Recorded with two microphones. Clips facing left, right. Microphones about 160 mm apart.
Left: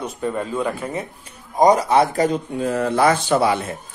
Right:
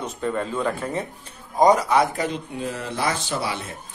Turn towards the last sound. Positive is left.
turn(degrees=55)  # may be behind; listen again after turning